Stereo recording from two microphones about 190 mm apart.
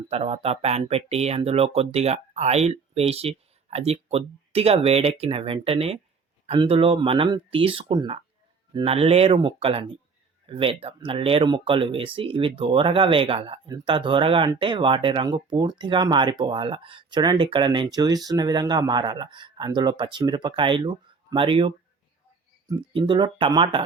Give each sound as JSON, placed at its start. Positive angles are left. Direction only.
{"t": 0.1, "sound": "speech", "side_deg": -30}
{"t": 22.9, "sound": "speech", "side_deg": -25}